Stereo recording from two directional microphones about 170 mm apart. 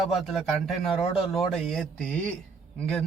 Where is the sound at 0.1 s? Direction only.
Centre (ahead or behind).